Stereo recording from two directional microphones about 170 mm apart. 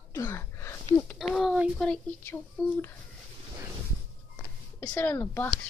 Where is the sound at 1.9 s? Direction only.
10° left (ahead or behind).